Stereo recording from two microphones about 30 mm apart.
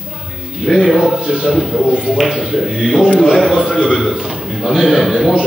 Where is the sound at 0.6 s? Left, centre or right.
Centre.